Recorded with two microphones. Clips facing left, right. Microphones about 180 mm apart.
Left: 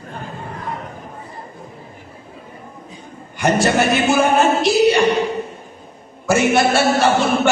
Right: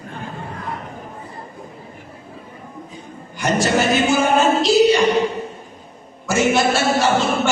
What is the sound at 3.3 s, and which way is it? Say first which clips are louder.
A man's voice: left 2 dB; 60° left (ahead or behind).